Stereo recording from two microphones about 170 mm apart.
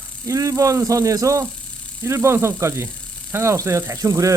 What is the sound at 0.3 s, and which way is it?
Speech, 20° right (ahead or behind).